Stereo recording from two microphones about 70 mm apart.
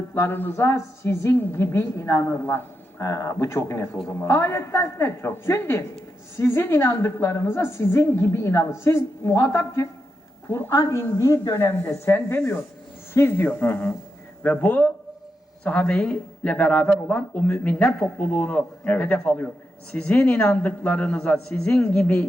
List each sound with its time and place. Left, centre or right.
0.3 s a woman's voice: left
2.2 s a woman's voice: left
3.0 s a woman's voice: left
21.1 s a man's voice: centre